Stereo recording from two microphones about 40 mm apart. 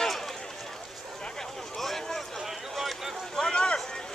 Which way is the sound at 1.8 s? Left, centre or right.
Centre.